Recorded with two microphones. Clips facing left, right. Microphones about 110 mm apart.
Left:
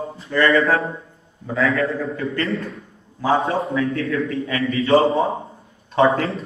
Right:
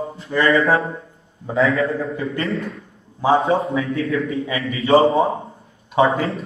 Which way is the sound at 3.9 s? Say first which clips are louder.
Right 1 dB; 25° right (ahead or behind).